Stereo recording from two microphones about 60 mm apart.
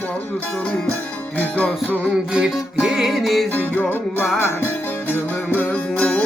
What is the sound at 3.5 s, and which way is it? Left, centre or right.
Music, left.